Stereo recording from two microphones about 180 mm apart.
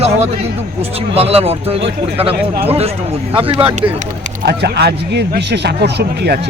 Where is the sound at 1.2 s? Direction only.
35° right (ahead or behind).